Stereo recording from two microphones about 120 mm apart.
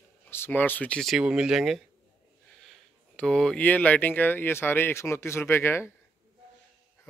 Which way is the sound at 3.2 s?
5° left (ahead or behind).